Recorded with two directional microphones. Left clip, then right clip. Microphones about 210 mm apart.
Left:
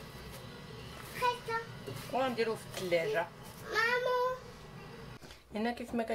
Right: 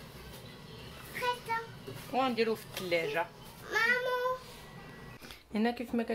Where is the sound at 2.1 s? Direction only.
30° right (ahead or behind).